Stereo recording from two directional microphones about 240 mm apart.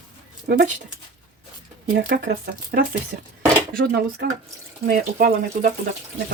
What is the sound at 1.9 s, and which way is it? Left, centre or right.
Speech, right.